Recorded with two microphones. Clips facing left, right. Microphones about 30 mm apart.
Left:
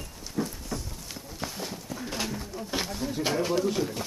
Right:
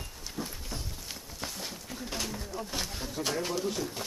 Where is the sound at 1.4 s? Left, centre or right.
Centre.